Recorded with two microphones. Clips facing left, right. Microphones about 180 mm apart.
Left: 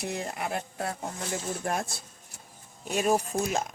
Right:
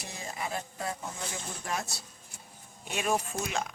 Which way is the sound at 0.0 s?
60° left (ahead or behind).